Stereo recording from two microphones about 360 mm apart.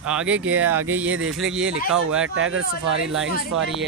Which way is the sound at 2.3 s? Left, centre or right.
Right.